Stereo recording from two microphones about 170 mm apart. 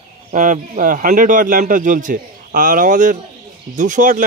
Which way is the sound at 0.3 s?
50° right (ahead or behind).